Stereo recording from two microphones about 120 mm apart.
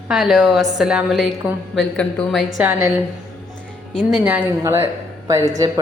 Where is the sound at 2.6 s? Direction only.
10° right (ahead or behind).